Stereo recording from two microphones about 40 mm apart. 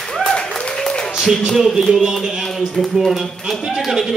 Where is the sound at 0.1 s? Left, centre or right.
Centre.